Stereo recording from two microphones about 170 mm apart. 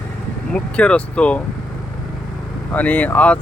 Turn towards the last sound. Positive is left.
turn(degrees=10)  # may be behind; listen again after turning